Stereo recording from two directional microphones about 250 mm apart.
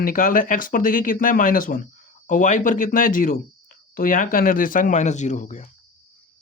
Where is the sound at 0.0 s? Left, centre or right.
Left.